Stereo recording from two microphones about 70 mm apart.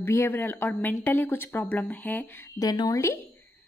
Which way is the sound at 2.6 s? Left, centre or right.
Left.